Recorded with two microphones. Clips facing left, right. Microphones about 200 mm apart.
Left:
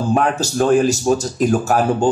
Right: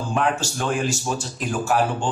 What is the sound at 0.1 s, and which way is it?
A man's voice, 40° left (ahead or behind).